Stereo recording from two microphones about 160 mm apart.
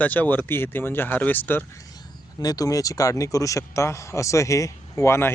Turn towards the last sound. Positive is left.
turn(degrees=15)  # may be behind; listen again after turning